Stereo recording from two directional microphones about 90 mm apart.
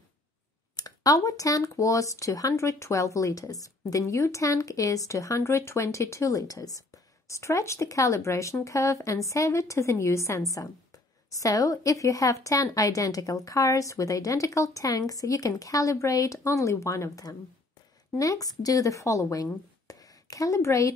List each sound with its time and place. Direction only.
0.7 s a woman's voice: 45° left (ahead or behind)